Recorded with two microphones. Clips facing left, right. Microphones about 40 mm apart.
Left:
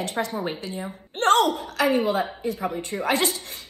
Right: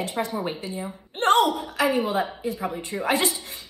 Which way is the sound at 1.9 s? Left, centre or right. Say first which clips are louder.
Left 3 dB; left.